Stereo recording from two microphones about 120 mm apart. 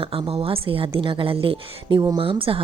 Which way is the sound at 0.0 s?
50° right (ahead or behind).